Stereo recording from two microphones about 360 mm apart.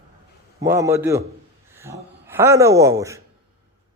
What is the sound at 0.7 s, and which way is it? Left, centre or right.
Speech, centre.